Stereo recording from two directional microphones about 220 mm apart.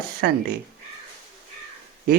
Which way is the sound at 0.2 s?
50° right (ahead or behind).